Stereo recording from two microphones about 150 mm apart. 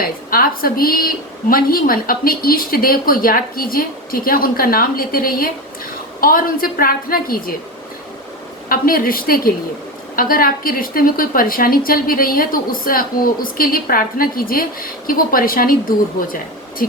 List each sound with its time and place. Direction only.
0.0 s a woman's voice: 80° left
8.7 s a woman's voice: 75° left (ahead or behind)